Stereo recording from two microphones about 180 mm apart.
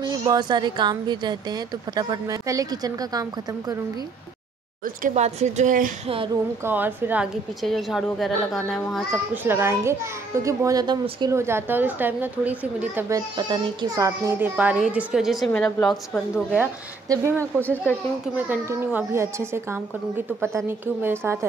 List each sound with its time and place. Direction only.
0.0 s a woman's voice: 25° right (ahead or behind)
5.0 s a woman's voice: 40° right (ahead or behind)
6.6 s a child's voice: 10° right (ahead or behind)
7.6 s a woman's voice: centre (ahead or behind)
9.3 s a child's voice: 10° right (ahead or behind)
13.4 s a child's voice: 20° right (ahead or behind); by 15.9 s 5° left (ahead or behind)
17.1 s a child's voice: 15° right (ahead or behind)
17.6 s speech: 10° left (ahead or behind)
18.3 s a child's voice: 10° right (ahead or behind)